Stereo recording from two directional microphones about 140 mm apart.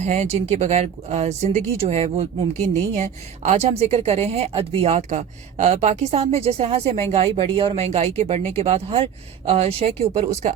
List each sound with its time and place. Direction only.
0.0 s speech: 55° right (ahead or behind)